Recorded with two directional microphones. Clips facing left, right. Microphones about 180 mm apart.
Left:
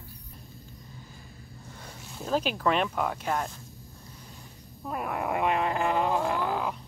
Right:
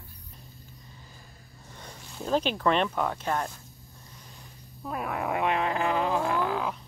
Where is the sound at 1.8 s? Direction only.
5° left (ahead or behind).